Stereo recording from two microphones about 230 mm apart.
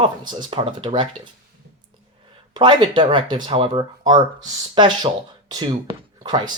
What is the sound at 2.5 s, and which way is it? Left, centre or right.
Speech, right.